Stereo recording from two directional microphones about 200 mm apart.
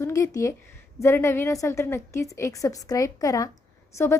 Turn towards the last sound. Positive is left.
turn(degrees=15)  # may be behind; listen again after turning